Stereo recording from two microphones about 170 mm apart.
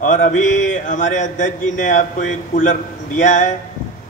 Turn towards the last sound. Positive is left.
turn(degrees=45)  # may be behind; listen again after turning